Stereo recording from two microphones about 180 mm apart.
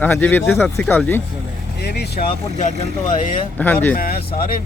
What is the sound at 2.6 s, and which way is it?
Speech, 40° left (ahead or behind).